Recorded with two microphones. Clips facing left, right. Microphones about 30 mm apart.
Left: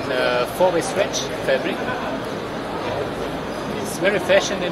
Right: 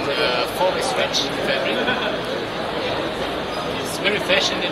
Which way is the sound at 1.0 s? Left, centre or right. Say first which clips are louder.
Right 1 dB; right.